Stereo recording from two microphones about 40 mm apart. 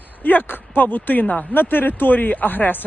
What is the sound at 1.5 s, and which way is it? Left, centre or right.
Speech, left.